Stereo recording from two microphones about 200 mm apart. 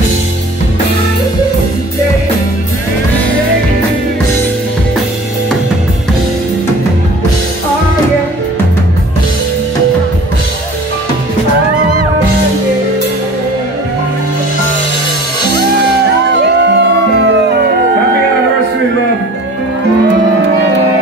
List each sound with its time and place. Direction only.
16.5 s music: 60° right (ahead or behind)